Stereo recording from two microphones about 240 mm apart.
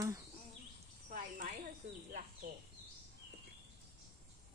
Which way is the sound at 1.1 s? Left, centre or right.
Right.